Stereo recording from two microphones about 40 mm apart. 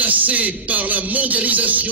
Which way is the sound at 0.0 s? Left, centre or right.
Right.